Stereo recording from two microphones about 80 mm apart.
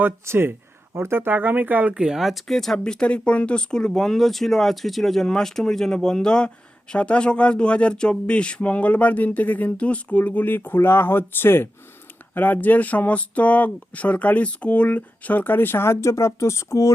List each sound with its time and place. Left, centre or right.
0.0 s speech: right; by 16.9 s left